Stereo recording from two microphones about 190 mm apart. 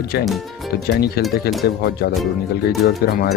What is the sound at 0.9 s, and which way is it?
Speech, 55° left (ahead or behind).